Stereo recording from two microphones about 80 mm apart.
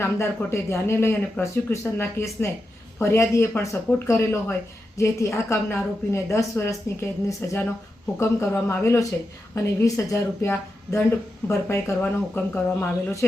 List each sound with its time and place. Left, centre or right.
0.0 s speech: left
12.3 s speech: left